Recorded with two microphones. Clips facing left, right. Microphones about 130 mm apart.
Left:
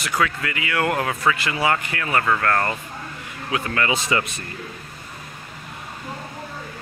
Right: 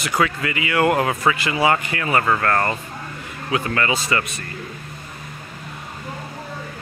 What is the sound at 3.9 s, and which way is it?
Speech, 15° left (ahead or behind).